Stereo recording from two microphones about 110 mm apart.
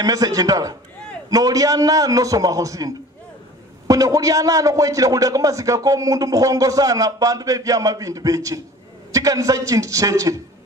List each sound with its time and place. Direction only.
0.0 s a man's voice: 35° right (ahead or behind)